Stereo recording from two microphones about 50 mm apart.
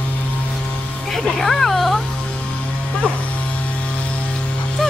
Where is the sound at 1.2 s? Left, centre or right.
Centre.